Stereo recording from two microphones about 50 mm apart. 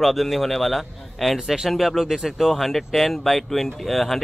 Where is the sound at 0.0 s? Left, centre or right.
Centre.